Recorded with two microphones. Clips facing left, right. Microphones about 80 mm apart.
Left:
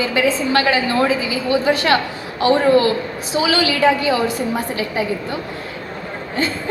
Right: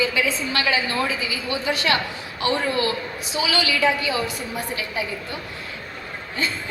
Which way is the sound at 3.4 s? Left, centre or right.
Left.